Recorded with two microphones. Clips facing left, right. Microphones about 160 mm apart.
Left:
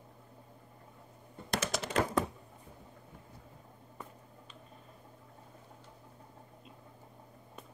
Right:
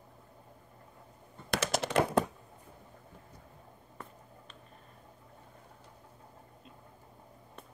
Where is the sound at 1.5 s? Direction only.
75° right (ahead or behind).